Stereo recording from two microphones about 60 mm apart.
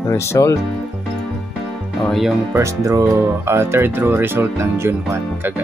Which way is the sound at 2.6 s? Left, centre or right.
Right.